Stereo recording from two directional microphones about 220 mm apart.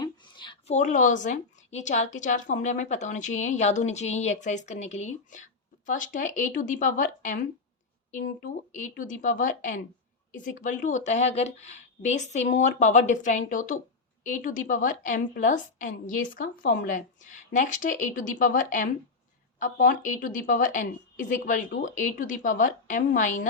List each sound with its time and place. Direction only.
0.0 s a woman's voice: 20° left (ahead or behind); by 7.3 s 35° left (ahead or behind)
8.4 s a woman's voice: 35° left (ahead or behind)